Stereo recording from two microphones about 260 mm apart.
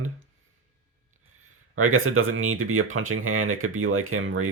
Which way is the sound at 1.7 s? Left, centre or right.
Right.